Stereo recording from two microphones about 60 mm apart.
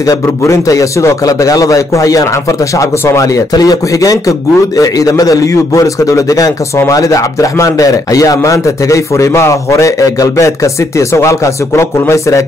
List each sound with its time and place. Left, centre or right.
0.0 s speech: left
8.4 s a man's voice: left